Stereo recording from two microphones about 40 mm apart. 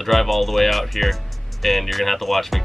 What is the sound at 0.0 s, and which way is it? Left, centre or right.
Speech, centre.